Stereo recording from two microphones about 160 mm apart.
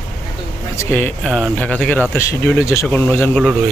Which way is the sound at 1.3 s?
Centre (ahead or behind).